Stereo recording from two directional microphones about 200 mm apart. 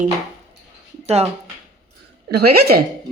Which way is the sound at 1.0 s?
30° right (ahead or behind).